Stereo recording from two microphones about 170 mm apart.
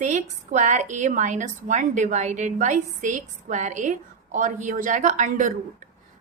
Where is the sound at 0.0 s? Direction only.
45° right (ahead or behind).